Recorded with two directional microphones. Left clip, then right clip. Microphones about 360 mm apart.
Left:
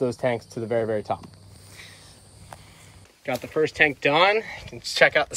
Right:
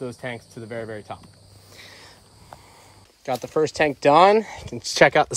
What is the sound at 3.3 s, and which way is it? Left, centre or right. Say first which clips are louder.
Speech: right 2 dB; centre.